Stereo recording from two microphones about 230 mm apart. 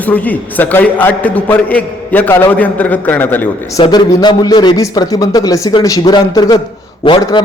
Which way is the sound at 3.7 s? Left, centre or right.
Left.